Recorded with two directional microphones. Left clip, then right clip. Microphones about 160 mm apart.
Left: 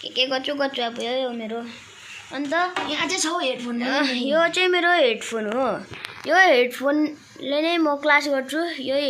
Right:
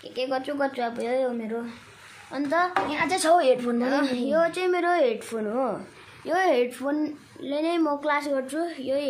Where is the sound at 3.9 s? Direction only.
Centre (ahead or behind).